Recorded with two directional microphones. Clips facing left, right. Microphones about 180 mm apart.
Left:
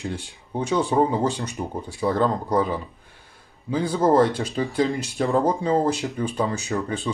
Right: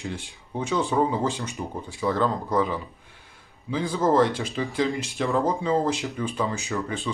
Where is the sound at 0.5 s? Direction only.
35° left (ahead or behind).